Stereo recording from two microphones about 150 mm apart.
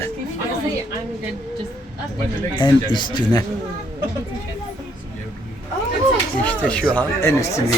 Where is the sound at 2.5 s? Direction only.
30° left (ahead or behind).